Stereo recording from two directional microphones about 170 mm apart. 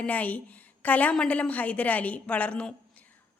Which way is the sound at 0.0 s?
10° left (ahead or behind).